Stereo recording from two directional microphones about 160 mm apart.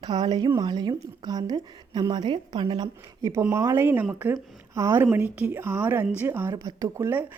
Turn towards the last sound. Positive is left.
turn(degrees=-15)  # may be behind; listen again after turning